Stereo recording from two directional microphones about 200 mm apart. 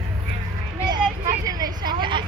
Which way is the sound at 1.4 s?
20° right (ahead or behind).